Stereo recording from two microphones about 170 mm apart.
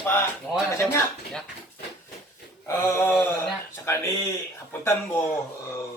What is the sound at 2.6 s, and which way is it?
Speech, 15° left (ahead or behind).